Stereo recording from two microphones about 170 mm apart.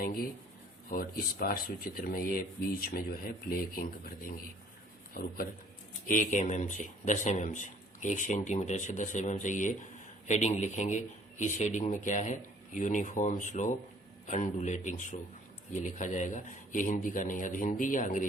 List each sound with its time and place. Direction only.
0.0 s speech: 60° left (ahead or behind)
6.1 s a man's voice: 50° left (ahead or behind)